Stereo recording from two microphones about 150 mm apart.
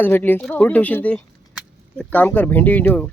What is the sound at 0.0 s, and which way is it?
Speech, 10° left (ahead or behind).